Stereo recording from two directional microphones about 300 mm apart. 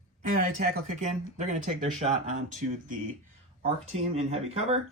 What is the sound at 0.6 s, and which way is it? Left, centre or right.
Speech, right.